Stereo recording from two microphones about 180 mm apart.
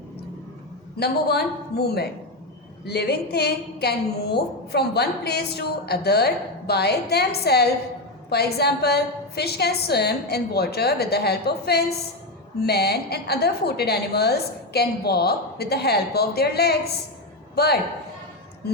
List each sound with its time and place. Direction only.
0.9 s a woman's voice: 65° left (ahead or behind)